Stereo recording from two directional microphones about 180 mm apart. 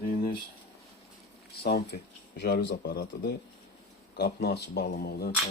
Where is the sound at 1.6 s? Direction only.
65° left (ahead or behind).